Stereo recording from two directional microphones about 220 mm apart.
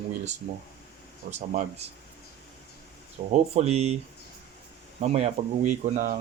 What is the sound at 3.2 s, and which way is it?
Speech, 35° right (ahead or behind).